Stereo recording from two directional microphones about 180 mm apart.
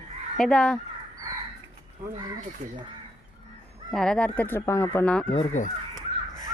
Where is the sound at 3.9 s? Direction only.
5° left (ahead or behind).